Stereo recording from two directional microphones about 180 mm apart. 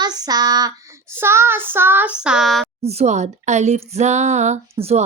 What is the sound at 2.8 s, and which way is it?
Speech, 35° right (ahead or behind).